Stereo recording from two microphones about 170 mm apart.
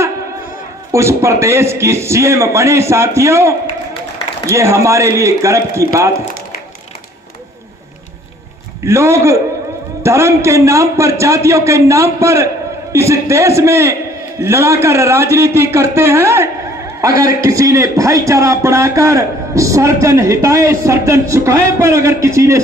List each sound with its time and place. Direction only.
0.9 s a man's voice: 15° right (ahead or behind)
8.8 s a man's voice: 15° right (ahead or behind)